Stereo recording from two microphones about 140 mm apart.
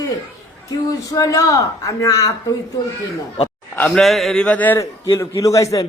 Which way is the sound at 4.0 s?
Centre (ahead or behind).